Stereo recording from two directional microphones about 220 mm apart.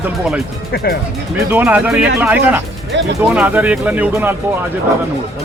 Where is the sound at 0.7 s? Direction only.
45° left (ahead or behind).